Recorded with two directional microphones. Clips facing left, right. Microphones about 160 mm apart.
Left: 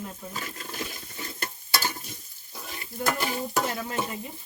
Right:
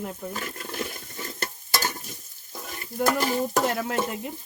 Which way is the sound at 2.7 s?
40° right (ahead or behind).